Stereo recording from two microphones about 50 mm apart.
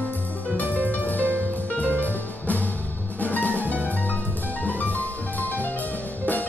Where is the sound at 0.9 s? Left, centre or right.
Left.